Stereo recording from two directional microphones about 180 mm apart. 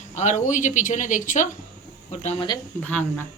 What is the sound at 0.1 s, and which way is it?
Speech, 40° left (ahead or behind).